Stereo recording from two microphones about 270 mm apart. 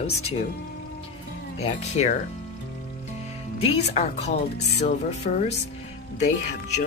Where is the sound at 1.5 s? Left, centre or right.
Left.